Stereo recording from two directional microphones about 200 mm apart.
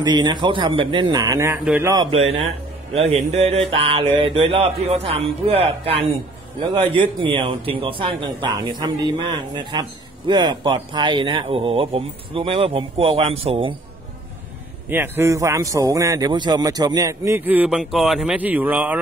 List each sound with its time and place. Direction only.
0.0 s a man's voice: 20° right (ahead or behind)
14.9 s a man's voice: 10° right (ahead or behind)